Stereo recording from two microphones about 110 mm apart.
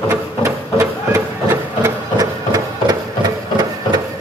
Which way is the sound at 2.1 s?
35° right (ahead or behind).